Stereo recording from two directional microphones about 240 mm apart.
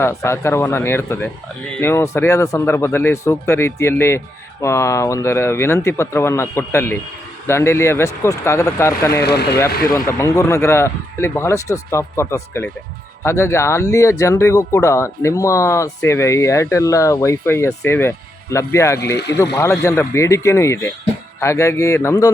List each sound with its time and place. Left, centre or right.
0.0 s speech: centre
9.2 s speech: left
9.9 s speech: centre
19.1 s speech: left
19.5 s speech: centre